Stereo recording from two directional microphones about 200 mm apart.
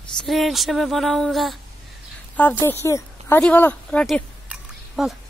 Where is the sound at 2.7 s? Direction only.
15° left (ahead or behind).